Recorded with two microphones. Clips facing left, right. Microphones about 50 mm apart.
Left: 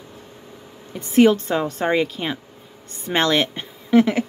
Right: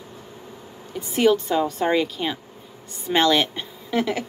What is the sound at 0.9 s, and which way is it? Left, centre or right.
Speech, left.